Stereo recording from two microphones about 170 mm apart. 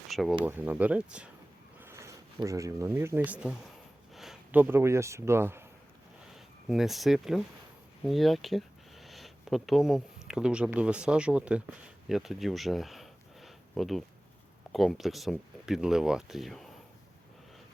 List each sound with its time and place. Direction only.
0.1 s speech: centre (ahead or behind)
0.4 s speech: 10° right (ahead or behind)
6.3 s speech: centre (ahead or behind)